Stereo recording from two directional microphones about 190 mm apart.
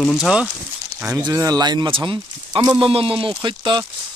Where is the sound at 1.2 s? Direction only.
20° right (ahead or behind).